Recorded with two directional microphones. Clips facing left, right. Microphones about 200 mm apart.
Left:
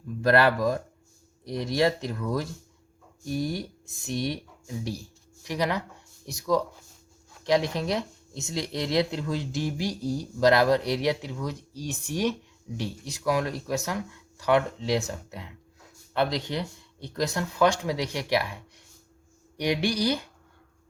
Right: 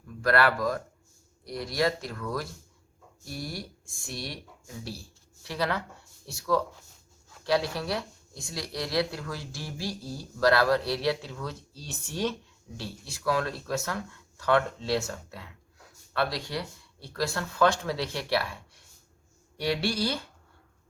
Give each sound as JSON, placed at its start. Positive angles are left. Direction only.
{"t": 0.2, "sound": "speech", "side_deg": 25}